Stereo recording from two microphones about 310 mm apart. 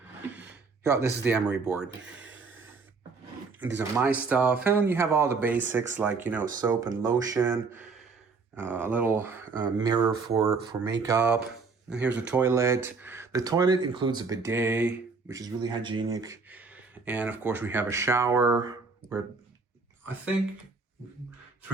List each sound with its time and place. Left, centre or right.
0.9 s speech: centre
2.1 s a sound: right
3.8 s speech: centre
12.0 s speech: right
12.3 s speech: centre